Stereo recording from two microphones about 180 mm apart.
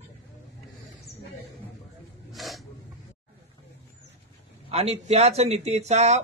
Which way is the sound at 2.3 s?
Centre (ahead or behind).